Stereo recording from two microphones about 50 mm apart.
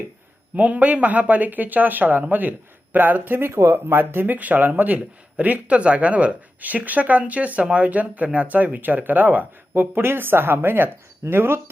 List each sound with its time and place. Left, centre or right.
0.5 s speech: right
3.5 s speech: right